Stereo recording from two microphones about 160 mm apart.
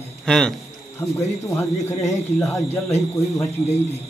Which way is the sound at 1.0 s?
15° left (ahead or behind).